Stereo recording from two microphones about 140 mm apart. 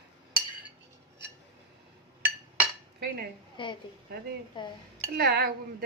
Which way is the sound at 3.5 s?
35° left (ahead or behind).